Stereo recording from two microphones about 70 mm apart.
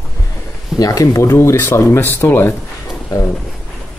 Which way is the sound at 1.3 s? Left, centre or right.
Left.